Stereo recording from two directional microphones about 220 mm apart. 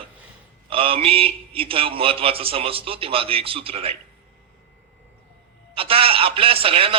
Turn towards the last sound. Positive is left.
turn(degrees=-25)  # may be behind; listen again after turning